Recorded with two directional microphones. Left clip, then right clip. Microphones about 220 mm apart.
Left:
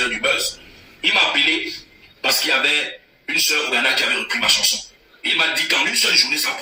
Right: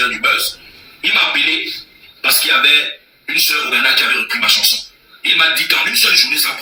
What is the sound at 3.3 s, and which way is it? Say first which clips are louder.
Speech: right 4 dB; 35° right (ahead or behind).